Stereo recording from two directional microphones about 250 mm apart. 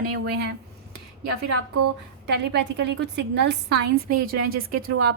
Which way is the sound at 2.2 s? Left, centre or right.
Right.